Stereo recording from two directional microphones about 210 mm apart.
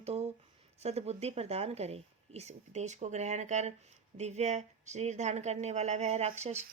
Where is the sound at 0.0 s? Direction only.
30° right (ahead or behind).